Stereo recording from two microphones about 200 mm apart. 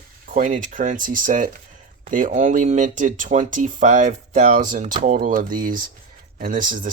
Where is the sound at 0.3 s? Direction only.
40° right (ahead or behind).